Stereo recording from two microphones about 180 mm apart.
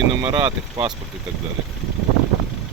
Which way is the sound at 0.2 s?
25° right (ahead or behind).